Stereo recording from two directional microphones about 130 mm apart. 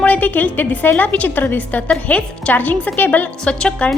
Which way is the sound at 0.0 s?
10° left (ahead or behind).